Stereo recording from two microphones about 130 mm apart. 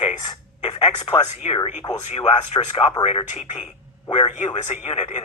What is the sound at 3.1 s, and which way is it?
Speech, 50° left (ahead or behind).